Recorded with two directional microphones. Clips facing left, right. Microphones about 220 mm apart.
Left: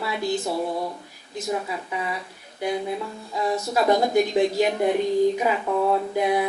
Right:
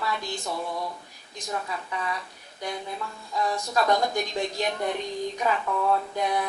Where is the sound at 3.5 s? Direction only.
20° left (ahead or behind).